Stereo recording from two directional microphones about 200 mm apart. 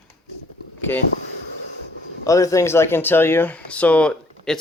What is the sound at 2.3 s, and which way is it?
Speech, 15° left (ahead or behind).